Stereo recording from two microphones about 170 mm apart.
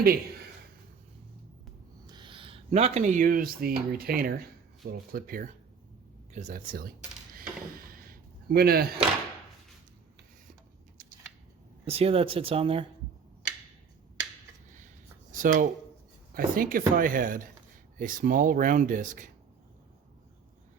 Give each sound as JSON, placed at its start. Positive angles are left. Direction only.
{"t": 2.0, "sound": "owl", "side_deg": -25}
{"t": 2.6, "sound": "speech", "side_deg": -40}
{"t": 7.9, "sound": "a sound", "side_deg": -60}
{"t": 11.9, "sound": "speech", "side_deg": -35}
{"t": 15.3, "sound": "speech", "side_deg": -50}